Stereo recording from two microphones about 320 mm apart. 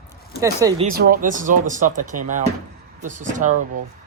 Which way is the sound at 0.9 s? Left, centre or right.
Right.